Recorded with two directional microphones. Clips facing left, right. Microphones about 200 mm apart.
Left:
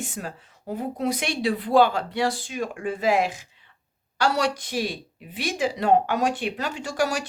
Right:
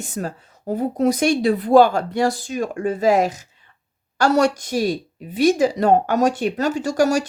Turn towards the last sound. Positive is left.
turn(degrees=-40)  # may be behind; listen again after turning